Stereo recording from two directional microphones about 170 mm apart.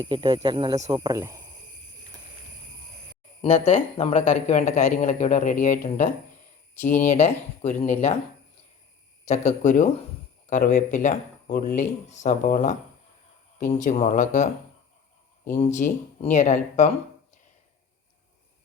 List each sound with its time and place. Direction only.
0.0 s speech: 30° right (ahead or behind)
3.4 s a man's voice: 45° left (ahead or behind)
7.0 s speech: 40° left (ahead or behind)
9.2 s a man's voice: 40° left (ahead or behind)
15.5 s a man's voice: 45° left (ahead or behind)